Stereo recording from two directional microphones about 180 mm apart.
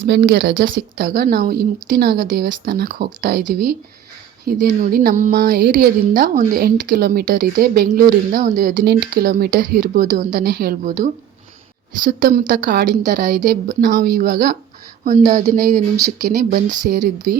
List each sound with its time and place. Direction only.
0.1 s a woman's voice: 80° right; by 5.5 s 45° right (ahead or behind)
5.5 s a woman's voice: 65° right (ahead or behind); by 17.0 s 50° right (ahead or behind)